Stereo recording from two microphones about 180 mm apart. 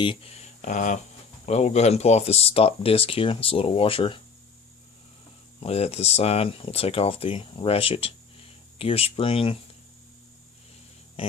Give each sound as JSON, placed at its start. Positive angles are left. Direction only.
{"t": 0.0, "sound": "speech", "side_deg": 30}
{"t": 5.5, "sound": "speech", "side_deg": 35}